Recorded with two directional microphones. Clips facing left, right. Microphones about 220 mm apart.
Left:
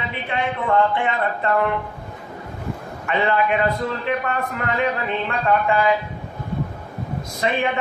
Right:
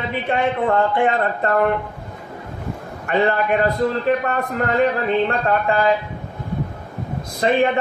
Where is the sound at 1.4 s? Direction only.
45° right (ahead or behind).